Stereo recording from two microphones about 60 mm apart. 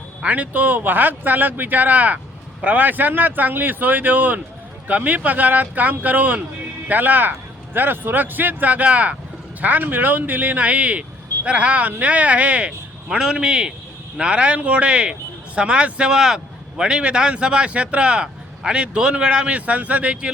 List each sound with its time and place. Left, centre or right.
0.3 s speech: right